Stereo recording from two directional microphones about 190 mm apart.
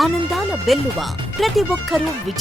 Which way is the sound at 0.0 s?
Centre (ahead or behind).